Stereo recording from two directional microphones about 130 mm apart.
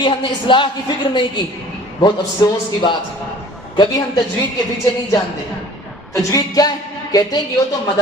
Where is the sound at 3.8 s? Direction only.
30° left (ahead or behind).